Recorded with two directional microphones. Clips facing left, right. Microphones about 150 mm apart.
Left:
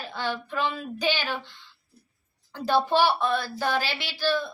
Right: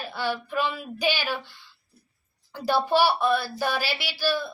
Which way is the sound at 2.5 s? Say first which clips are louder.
Even; 10° right (ahead or behind).